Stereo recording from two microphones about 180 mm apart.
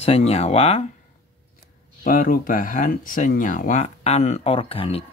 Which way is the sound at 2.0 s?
50° left (ahead or behind).